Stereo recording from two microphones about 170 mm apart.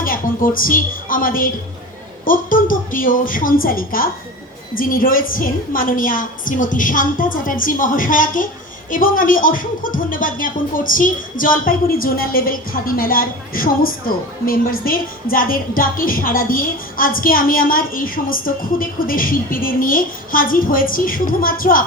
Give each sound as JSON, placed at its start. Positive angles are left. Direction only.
{"t": 0.0, "sound": "a woman's voice", "side_deg": 55}